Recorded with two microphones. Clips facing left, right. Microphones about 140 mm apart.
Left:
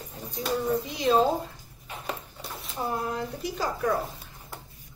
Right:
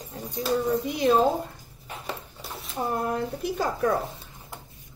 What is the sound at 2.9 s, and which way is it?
Speech, 55° right (ahead or behind).